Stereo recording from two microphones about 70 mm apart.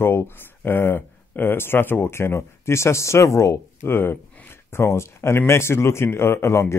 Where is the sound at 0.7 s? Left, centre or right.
Left.